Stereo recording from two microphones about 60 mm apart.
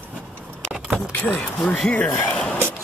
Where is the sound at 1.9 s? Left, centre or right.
Left.